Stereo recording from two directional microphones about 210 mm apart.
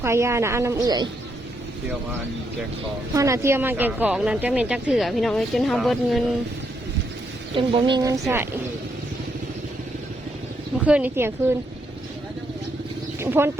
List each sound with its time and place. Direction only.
0.0 s a woman's voice: 15° right (ahead or behind)
3.1 s speech: 15° right (ahead or behind); by 6.2 s centre (ahead or behind)
7.5 s speech: 25° right (ahead or behind)
10.8 s speech: 5° right (ahead or behind)
13.1 s wild animals: 10° right (ahead or behind)